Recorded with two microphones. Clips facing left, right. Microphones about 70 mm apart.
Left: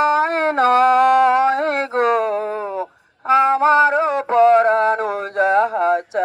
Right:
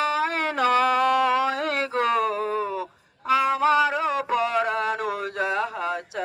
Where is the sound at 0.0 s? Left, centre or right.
Left.